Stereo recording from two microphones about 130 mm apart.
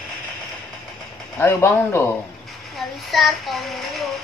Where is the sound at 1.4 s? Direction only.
15° left (ahead or behind).